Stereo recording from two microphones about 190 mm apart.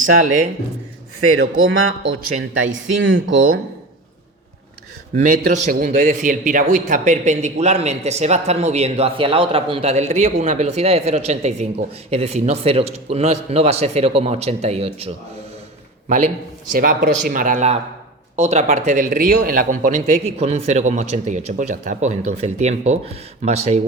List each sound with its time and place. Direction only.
1.2 s a man's voice: 90° right
5.5 s a man's voice: 45° right (ahead or behind)